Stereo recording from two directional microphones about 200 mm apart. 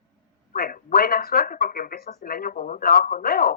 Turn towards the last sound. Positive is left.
turn(degrees=50)  # may be behind; listen again after turning